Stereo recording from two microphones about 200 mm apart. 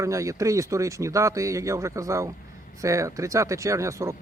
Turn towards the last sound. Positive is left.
turn(degrees=-15)  # may be behind; listen again after turning